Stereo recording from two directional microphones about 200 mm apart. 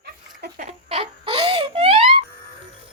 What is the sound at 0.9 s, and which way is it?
Wail, 25° right (ahead or behind).